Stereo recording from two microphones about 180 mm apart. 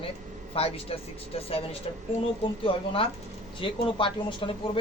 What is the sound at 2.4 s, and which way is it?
A man's voice, 30° left (ahead or behind).